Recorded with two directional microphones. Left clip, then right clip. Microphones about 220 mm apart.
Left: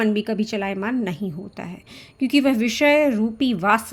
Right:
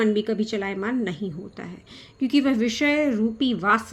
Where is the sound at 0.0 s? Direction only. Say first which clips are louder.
Even; 30° left (ahead or behind).